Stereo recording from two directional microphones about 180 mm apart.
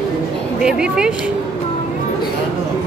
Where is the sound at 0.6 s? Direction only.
5° right (ahead or behind).